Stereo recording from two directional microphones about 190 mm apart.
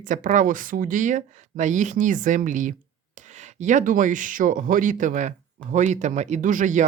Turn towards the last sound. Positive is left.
turn(degrees=-40)  # may be behind; listen again after turning